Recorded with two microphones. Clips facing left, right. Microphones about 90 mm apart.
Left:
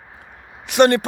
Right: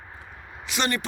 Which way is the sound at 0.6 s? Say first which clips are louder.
Left 13 dB; 55° left (ahead or behind).